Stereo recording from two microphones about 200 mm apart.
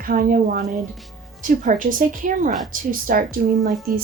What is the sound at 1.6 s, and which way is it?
A woman's voice, 40° right (ahead or behind).